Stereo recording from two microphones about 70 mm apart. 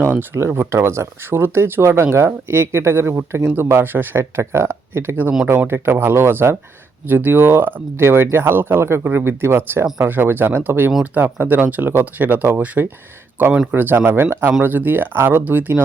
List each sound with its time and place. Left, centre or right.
0.0 s speech: right
4.2 s speech: right